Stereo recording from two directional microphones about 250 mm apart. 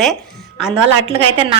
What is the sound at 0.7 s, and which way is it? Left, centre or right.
Speech, right.